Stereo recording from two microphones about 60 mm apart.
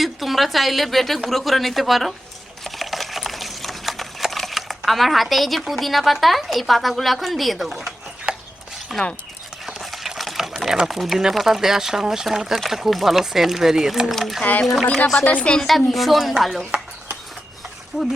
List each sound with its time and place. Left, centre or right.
0.0 s speech: centre
2.6 s sewing machine: centre
8.3 s a sound: right
8.9 s speech: centre
9.6 s a sound: centre
10.8 s speech: centre
14.8 s a woman's voice: left
15.9 s speech: centre
17.9 s speech: centre